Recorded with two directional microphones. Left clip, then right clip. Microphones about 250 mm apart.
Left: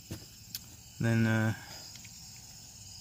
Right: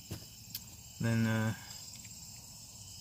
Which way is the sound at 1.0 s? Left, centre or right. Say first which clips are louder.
Left 4 dB; left.